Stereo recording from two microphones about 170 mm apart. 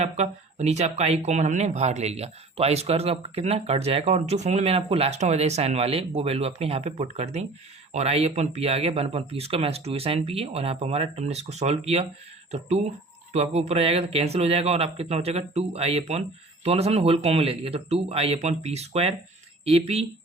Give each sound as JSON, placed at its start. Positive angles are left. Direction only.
{"t": 0.0, "sound": "speech", "side_deg": -40}